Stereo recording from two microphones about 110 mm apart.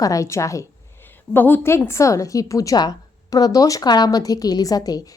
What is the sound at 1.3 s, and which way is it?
A woman's voice, 15° left (ahead or behind).